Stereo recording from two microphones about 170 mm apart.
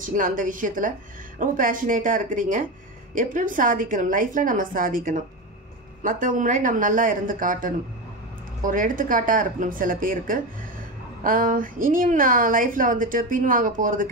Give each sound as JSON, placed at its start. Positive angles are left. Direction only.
{"t": 0.0, "sound": "a woman's voice", "side_deg": -50}